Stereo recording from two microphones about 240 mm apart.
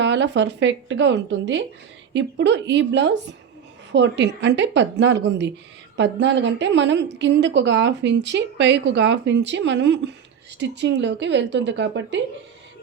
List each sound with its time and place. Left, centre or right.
0.0 s speech: right